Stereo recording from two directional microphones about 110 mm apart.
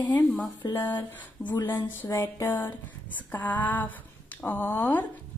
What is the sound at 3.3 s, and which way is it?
Speech, 15° left (ahead or behind).